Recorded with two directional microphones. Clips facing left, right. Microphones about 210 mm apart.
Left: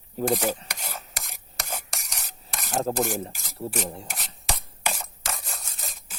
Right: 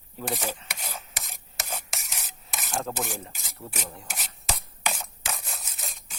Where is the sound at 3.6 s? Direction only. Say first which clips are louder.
Left 9 dB; 30° left (ahead or behind).